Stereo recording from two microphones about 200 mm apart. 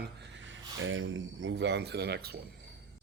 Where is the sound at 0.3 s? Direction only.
70° right (ahead or behind); by 2.4 s 55° right (ahead or behind).